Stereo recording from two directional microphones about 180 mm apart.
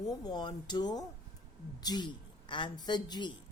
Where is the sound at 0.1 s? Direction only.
20° left (ahead or behind).